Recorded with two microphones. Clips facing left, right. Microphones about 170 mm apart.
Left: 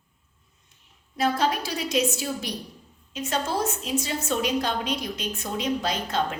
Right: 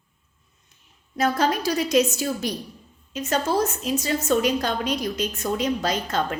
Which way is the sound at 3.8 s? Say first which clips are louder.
Right 3 dB; 40° right (ahead or behind).